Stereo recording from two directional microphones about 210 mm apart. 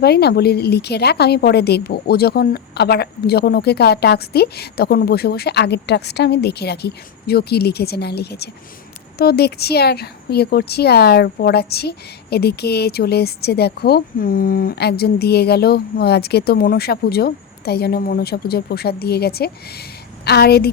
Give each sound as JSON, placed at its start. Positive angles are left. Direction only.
{"t": 0.0, "sound": "speech", "side_deg": 50}